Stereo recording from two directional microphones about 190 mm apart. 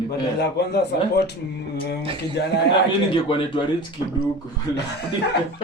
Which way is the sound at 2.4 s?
65° left (ahead or behind).